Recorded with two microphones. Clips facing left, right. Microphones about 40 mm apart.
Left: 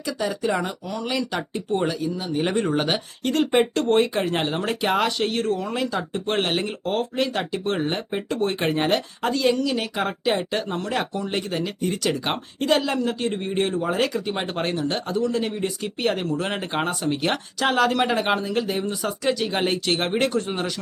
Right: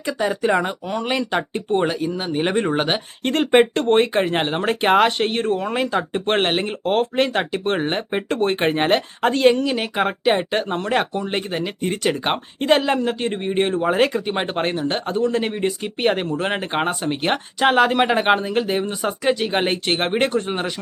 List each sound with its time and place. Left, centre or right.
0.0 s speech: right
2.4 s speech: right
3.3 s speech: right